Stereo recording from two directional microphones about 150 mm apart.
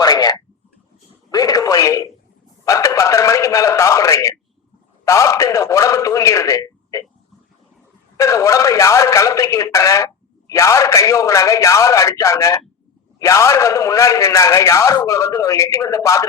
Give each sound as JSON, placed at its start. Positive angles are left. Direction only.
{"t": 0.0, "sound": "a sound", "side_deg": 25}
{"t": 1.3, "sound": "a man's voice", "side_deg": 25}
{"t": 8.1, "sound": "a man's voice", "side_deg": 20}